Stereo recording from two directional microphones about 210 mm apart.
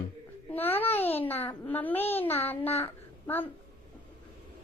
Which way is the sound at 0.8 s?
10° left (ahead or behind).